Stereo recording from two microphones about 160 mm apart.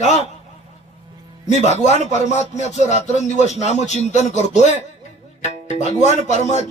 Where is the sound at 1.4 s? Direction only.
45° left (ahead or behind).